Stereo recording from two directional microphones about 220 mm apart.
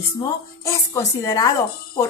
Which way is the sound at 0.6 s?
15° left (ahead or behind).